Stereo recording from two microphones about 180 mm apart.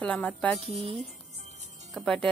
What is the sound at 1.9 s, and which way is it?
Speech, centre (ahead or behind).